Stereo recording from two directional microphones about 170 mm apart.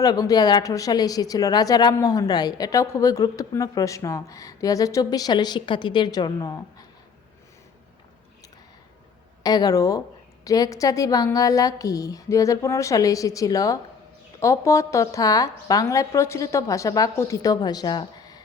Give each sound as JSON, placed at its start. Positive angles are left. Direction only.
{"t": 0.0, "sound": "a woman's voice", "side_deg": 20}
{"t": 9.4, "sound": "a woman's voice", "side_deg": 20}